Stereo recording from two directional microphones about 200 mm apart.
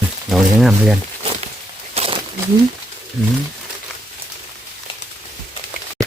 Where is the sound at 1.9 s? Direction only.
30° right (ahead or behind).